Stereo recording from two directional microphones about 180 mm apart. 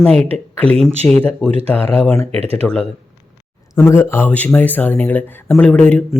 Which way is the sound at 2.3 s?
35° right (ahead or behind).